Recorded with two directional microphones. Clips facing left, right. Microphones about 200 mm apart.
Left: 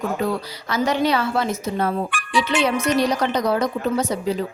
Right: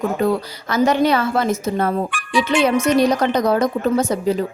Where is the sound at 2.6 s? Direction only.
50° right (ahead or behind).